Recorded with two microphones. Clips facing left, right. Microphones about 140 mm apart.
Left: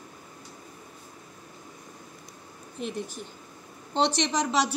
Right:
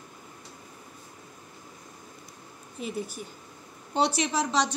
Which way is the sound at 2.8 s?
5° right (ahead or behind).